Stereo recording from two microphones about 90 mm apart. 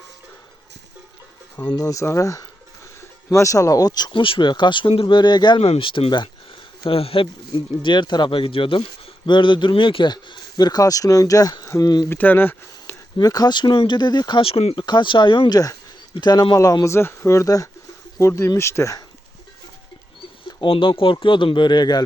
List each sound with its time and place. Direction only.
1.6 s speech: 45° left (ahead or behind)
4.1 s speech: 70° left (ahead or behind); by 5.5 s 55° left (ahead or behind)
5.5 s speech: 90° left; by 6.2 s 65° left (ahead or behind)
6.8 s speech: 90° left
7.8 s speech: 60° left (ahead or behind)
9.2 s speech: 60° left (ahead or behind); by 12.0 s 45° left (ahead or behind)
12.0 s speech: 20° left (ahead or behind)
13.1 s speech: 50° left (ahead or behind); by 14.8 s 90° left
14.8 s speech: 60° left (ahead or behind)
16.2 s speech: 55° left (ahead or behind)
16.8 s speech: 30° left (ahead or behind)
20.7 s speech: 75° left (ahead or behind); by 22.0 s 50° left (ahead or behind)